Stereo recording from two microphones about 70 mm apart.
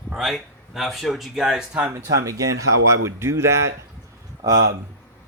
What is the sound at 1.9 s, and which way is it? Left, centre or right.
Speech, right.